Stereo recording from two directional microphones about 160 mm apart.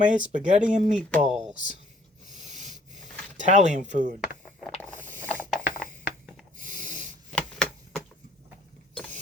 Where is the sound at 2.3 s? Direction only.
50° right (ahead or behind).